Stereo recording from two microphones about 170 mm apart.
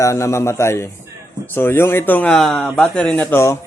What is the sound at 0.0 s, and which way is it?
Speech, 15° left (ahead or behind).